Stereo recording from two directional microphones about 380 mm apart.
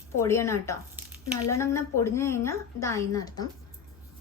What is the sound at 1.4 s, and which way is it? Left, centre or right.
A woman's voice, centre.